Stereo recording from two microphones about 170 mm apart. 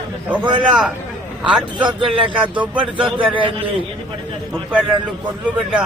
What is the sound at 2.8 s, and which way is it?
Speech, 30° right (ahead or behind).